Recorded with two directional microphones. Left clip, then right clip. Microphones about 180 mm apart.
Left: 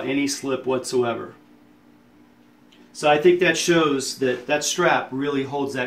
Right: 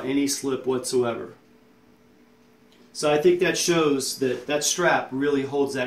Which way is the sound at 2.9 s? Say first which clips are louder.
Left 3 dB; 5° left (ahead or behind).